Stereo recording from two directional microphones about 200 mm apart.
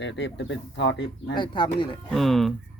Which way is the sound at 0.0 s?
65° left (ahead or behind).